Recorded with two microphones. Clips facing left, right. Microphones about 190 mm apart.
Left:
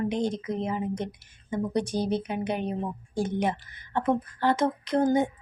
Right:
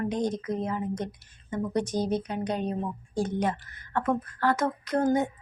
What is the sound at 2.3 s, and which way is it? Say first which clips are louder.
A woman's voice: even; 25° left (ahead or behind).